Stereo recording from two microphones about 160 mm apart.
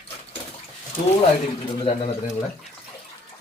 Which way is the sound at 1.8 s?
35° left (ahead or behind).